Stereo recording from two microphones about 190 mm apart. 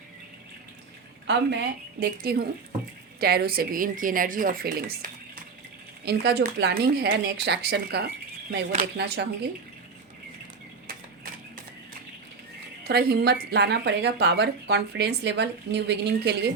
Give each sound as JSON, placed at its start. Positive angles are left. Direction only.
{"t": 1.3, "sound": "a woman's voice", "side_deg": -65}
{"t": 12.8, "sound": "a woman's voice", "side_deg": -55}